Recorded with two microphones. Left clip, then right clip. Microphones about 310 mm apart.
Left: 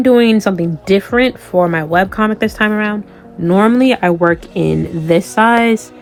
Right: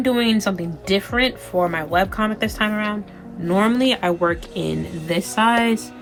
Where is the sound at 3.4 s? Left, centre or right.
Left.